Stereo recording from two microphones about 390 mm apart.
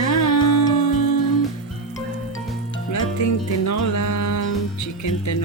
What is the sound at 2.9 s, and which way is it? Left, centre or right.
Music, left.